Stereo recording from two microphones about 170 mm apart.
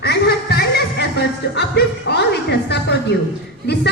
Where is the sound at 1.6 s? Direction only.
80° left.